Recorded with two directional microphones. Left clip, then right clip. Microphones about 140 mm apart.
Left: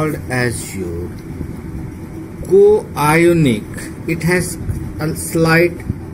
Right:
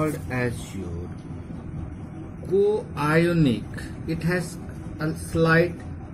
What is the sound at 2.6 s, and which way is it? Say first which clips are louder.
Speech: left 12 dB; 30° left (ahead or behind).